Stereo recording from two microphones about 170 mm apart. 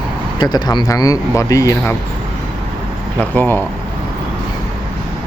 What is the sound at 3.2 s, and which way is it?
Speech, 10° left (ahead or behind).